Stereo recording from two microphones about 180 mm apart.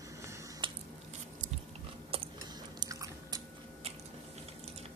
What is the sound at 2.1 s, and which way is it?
Chewing, 30° right (ahead or behind).